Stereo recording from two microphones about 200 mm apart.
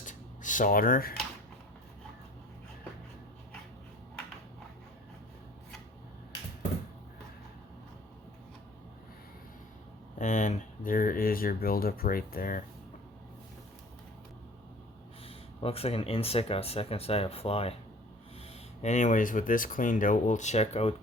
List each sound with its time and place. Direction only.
0.0 s a sound: 40° left (ahead or behind)
10.2 s speech: 40° left (ahead or behind)
15.6 s speech: 30° left (ahead or behind)
18.8 s speech: 35° left (ahead or behind)